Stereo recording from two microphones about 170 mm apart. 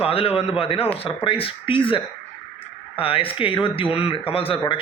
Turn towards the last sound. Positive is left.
turn(degrees=30)  # may be behind; listen again after turning